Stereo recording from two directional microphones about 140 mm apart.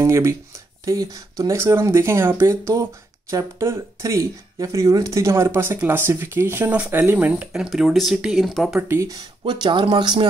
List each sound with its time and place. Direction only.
0.0 s speech: 20° right (ahead or behind); by 8.8 s centre (ahead or behind)
8.8 s speech: 20° right (ahead or behind)
9.4 s speech: 35° right (ahead or behind)